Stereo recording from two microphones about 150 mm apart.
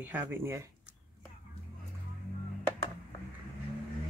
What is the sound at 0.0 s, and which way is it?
Speech, 15° right (ahead or behind).